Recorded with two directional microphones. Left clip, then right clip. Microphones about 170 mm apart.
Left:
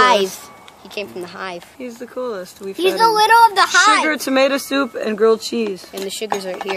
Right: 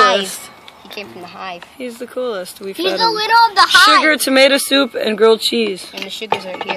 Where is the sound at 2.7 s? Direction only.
45° left (ahead or behind).